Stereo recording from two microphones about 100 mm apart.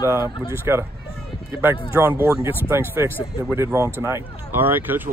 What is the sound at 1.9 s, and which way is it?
Speech, 20° right (ahead or behind).